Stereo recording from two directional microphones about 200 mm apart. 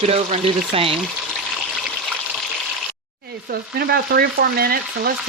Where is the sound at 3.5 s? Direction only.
50° right (ahead or behind).